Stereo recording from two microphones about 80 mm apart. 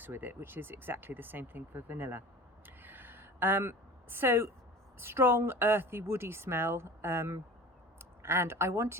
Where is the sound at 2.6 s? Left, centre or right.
Right.